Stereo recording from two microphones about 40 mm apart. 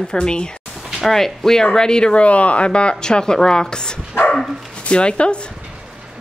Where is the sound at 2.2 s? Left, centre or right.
Left.